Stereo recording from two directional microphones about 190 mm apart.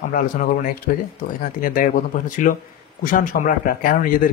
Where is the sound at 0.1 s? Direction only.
45° left (ahead or behind).